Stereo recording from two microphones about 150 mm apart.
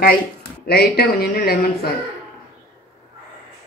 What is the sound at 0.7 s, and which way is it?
Speech, 90° left.